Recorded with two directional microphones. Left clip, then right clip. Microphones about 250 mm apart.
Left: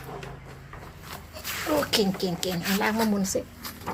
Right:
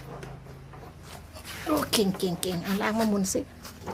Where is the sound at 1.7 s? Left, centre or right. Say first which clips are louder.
Left 1 dB; centre.